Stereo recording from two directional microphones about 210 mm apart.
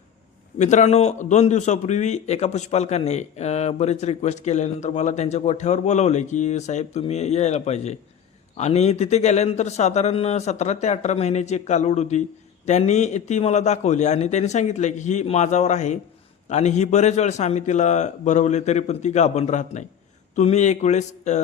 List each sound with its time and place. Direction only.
0.6 s a man's voice: 35° left (ahead or behind)